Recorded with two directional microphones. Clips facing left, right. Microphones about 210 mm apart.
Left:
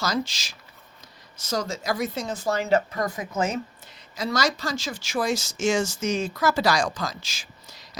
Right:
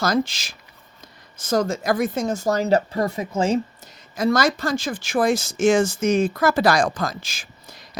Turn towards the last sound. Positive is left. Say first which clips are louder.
# right 3 dB
turn(degrees=-55)  # may be behind; listen again after turning